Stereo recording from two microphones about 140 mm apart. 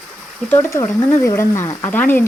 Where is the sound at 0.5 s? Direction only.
20° left (ahead or behind).